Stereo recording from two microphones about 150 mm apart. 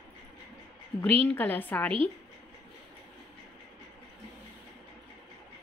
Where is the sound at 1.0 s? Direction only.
10° left (ahead or behind).